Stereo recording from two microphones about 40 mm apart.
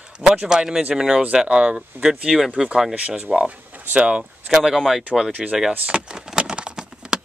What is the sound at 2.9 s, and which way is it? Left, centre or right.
Speech, right.